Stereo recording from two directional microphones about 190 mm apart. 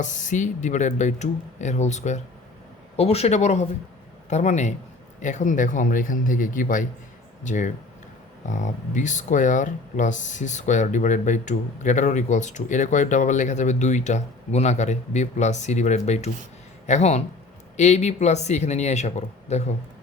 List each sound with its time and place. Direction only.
0.0 s speech: 40° left (ahead or behind)